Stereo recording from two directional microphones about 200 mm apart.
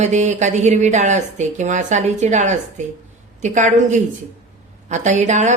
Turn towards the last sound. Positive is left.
turn(degrees=-35)  # may be behind; listen again after turning